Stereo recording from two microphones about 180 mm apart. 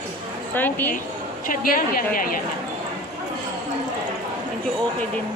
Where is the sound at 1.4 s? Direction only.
50° left (ahead or behind).